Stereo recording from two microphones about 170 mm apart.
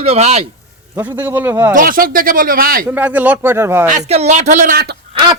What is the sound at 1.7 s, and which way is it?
Speech, 55° right (ahead or behind).